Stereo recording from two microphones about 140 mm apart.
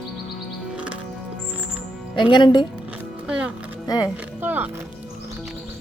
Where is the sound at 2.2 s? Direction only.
35° left (ahead or behind).